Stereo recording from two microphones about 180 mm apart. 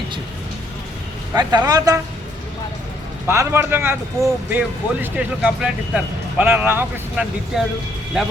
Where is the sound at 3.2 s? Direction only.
15° right (ahead or behind).